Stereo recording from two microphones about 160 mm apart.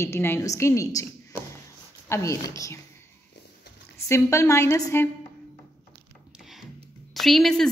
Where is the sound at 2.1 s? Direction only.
20° left (ahead or behind).